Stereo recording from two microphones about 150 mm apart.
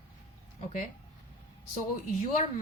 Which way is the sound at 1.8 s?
55° left (ahead or behind).